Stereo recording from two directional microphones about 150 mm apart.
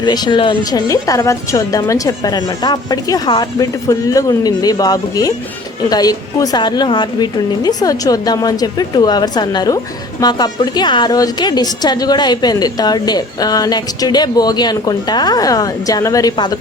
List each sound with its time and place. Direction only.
0.0 s a woman's voice: 30° left (ahead or behind)